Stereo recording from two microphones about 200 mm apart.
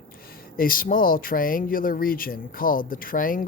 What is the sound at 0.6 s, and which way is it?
Speech, 45° left (ahead or behind).